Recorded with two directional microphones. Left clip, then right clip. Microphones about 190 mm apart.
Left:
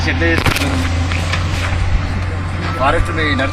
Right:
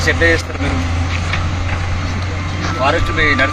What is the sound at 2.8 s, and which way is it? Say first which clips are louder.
Speech: right 2 dB; 5° right (ahead or behind).